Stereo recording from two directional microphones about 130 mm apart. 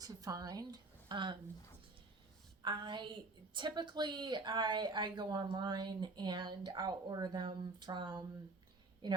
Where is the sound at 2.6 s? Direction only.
35° right (ahead or behind).